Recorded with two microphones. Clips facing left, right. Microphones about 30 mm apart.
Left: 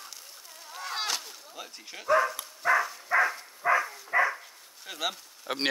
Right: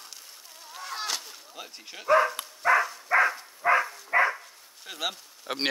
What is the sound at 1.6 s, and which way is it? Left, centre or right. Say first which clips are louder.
Speech: right 1 dB; centre.